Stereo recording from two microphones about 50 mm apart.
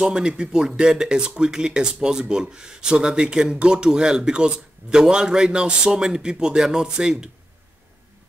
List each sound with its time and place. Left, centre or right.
0.0 s speech: centre